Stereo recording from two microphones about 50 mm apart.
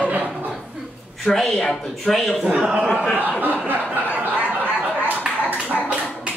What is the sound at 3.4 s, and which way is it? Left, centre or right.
Chuckle, right.